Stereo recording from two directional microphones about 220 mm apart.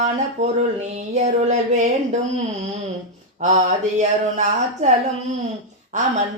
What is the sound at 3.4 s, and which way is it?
Mantra, 35° right (ahead or behind).